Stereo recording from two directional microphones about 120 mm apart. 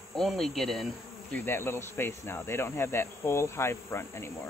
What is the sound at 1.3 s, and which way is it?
Cricket, 20° left (ahead or behind).